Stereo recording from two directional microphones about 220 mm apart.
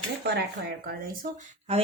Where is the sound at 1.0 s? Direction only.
35° right (ahead or behind).